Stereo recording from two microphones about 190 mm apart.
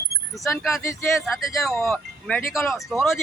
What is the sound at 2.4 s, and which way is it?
Speech, 15° left (ahead or behind).